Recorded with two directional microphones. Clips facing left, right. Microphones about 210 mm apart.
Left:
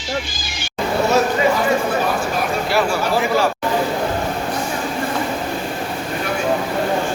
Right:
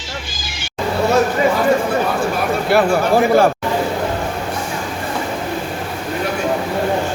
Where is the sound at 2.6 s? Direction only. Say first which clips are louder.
Right 7 dB; 55° right (ahead or behind).